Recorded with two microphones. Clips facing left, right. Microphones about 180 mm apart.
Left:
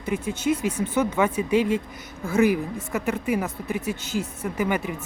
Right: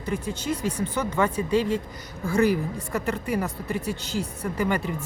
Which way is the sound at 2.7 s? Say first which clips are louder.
Left 1 dB; 5° left (ahead or behind).